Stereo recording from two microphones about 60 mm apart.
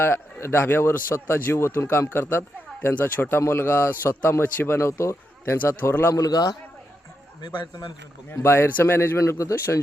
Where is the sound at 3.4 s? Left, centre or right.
Left.